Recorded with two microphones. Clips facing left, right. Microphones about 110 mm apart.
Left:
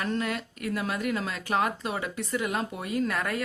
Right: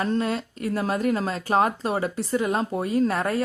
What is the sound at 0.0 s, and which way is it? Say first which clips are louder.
Speech: right 5 dB; 30° right (ahead or behind).